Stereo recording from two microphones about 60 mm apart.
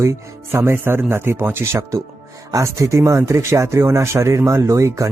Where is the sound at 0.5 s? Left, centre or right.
Right.